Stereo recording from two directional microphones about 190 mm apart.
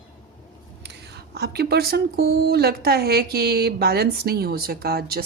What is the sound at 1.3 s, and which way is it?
Speech, 60° right (ahead or behind).